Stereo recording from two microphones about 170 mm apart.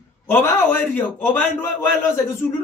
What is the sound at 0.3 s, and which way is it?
A man's voice, 15° left (ahead or behind).